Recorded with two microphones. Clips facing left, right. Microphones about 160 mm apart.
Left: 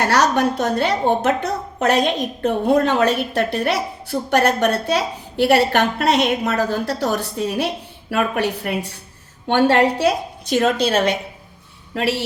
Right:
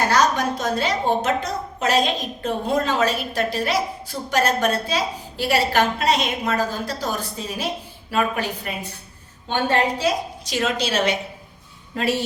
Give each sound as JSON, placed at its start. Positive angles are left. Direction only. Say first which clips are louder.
{"t": 0.0, "sound": "a woman's voice", "louder": "left 3 dB", "side_deg": 70}
{"t": 11.9, "sound": "speech", "louder": "left 3 dB", "side_deg": 75}